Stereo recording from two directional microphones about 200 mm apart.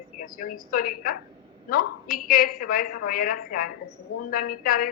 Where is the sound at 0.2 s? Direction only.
45° left (ahead or behind).